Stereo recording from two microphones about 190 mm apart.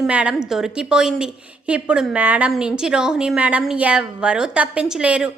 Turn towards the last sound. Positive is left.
turn(degrees=-5)  # may be behind; listen again after turning